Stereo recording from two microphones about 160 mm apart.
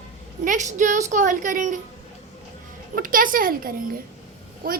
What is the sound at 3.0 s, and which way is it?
Speech, 60° right (ahead or behind).